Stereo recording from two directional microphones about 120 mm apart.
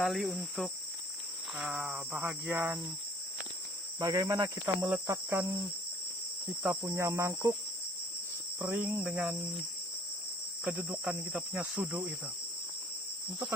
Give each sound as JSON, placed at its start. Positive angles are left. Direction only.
{"t": 0.0, "sound": "cricket", "side_deg": 0}
{"t": 4.0, "sound": "insect", "side_deg": -30}
{"t": 6.8, "sound": "insect", "side_deg": -20}
{"t": 8.6, "sound": "cricket", "side_deg": -10}
{"t": 10.6, "sound": "cricket", "side_deg": -10}